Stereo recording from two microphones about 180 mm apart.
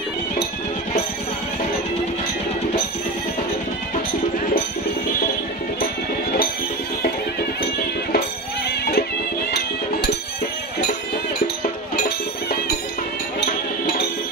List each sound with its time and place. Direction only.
8.6 s music: 60° left (ahead or behind)